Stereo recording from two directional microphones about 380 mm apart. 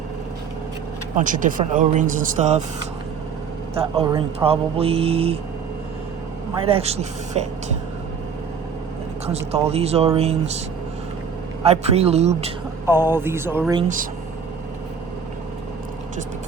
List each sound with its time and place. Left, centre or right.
1.1 s speech: right
3.8 s speech: centre
6.7 s speech: centre
9.2 s speech: centre
11.6 s speech: centre
12.8 s speech: centre